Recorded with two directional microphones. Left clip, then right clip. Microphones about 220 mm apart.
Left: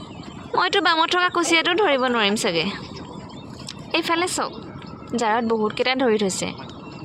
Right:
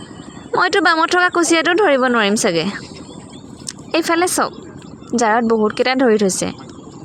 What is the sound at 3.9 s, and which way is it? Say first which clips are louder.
Speech: right 6 dB; 30° right (ahead or behind).